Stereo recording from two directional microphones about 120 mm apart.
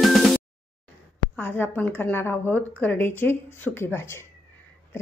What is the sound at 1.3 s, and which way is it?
A woman's voice, 20° left (ahead or behind).